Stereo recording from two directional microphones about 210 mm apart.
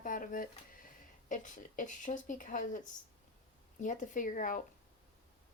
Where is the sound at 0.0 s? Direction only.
40° left (ahead or behind).